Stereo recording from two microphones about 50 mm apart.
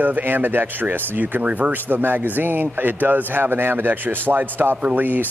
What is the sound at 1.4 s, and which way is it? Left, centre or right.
Speech, right.